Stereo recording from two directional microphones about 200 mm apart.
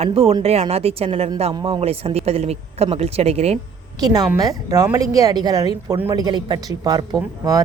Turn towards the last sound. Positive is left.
turn(degrees=-20)  # may be behind; listen again after turning